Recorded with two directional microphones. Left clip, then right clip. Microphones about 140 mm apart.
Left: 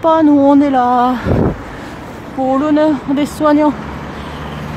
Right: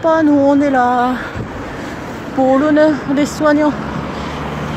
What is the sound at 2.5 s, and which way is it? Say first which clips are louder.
Speech: right 1 dB; 10° left (ahead or behind).